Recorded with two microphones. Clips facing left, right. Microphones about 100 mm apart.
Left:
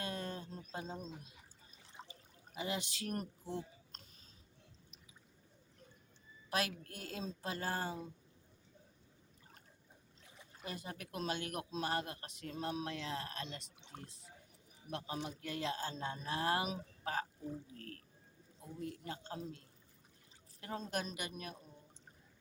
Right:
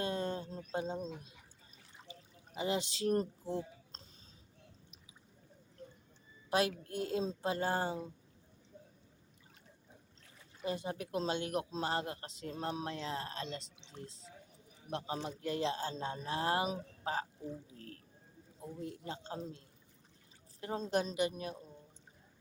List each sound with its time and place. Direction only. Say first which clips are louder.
0.0 s a sound: right 6 dB; 30° right (ahead or behind)
2.6 s speech: right 6 dB; 30° right (ahead or behind)
6.5 s speech: right 6 dB; 25° right (ahead or behind)
10.6 s speech: right 8 dB; 25° right (ahead or behind)
14.8 s speech: right 3 dB; 30° right (ahead or behind)
18.6 s speech: right 2 dB; 25° right (ahead or behind)